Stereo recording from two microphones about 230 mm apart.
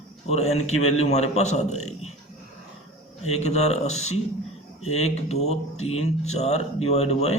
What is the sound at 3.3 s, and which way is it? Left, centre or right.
Speech, left.